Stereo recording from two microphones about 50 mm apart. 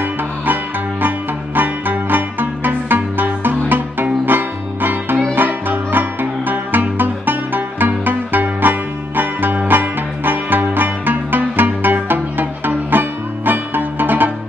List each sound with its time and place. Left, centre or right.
1.0 s music: right